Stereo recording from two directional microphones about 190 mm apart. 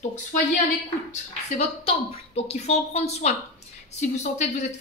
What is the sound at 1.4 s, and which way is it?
A woman's voice, 35° left (ahead or behind).